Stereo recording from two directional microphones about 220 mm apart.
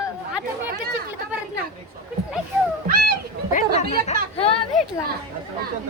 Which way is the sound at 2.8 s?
40° right (ahead or behind).